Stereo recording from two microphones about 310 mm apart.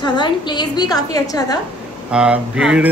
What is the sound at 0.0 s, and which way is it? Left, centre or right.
A woman's voice, centre.